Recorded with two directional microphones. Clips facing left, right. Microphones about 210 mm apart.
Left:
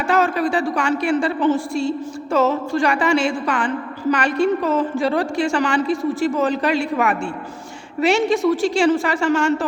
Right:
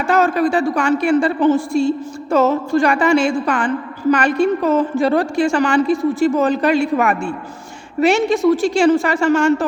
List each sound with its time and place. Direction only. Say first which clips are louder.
0.1 s a woman's voice: right 3 dB; 45° right (ahead or behind)